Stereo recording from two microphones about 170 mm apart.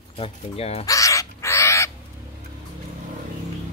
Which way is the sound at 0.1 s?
35° left (ahead or behind).